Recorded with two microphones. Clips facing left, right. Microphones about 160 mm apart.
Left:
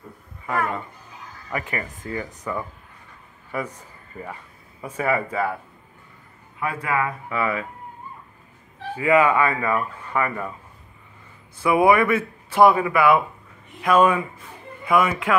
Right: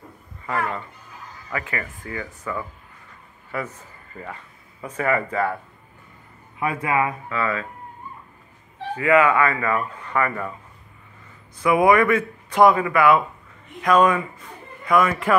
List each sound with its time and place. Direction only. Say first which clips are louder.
1.5 s speech: left 1 dB; 20° left (ahead or behind)
6.6 s speech: right 2 dB; 20° right (ahead or behind)
7.2 s speech: even; 15° left (ahead or behind)
8.9 s speech: even; 10° left (ahead or behind)
11.5 s speech: even; 10° left (ahead or behind)